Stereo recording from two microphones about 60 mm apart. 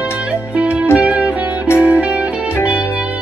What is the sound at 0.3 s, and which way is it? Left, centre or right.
Music, right.